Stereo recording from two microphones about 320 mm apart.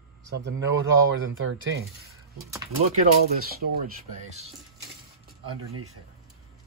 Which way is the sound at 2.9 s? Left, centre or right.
Right.